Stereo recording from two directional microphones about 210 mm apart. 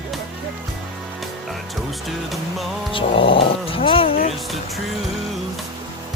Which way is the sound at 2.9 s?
25° left (ahead or behind).